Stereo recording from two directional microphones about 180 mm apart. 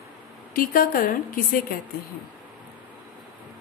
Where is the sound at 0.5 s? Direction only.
55° left (ahead or behind).